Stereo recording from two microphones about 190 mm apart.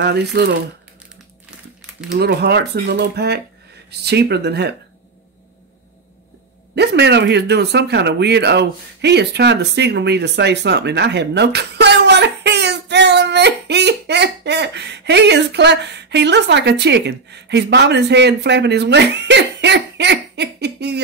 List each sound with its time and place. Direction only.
0.0 s speech: 60° right (ahead or behind)
2.0 s speech: 60° right (ahead or behind)
6.7 s speech: 60° right (ahead or behind)